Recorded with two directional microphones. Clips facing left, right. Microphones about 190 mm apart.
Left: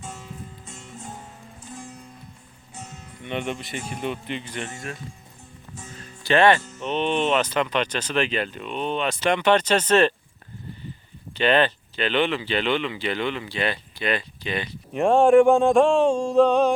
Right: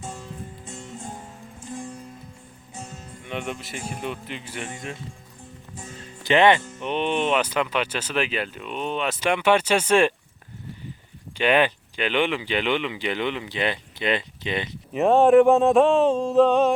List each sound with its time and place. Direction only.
3.2 s speech: centre (ahead or behind)
6.2 s speech: 15° right (ahead or behind)
11.3 s speech: 10° right (ahead or behind)
14.9 s speech: centre (ahead or behind)